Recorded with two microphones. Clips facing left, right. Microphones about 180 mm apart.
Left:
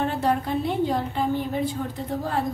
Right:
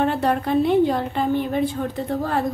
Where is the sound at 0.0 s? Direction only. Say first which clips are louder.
Right 3 dB; 65° right (ahead or behind).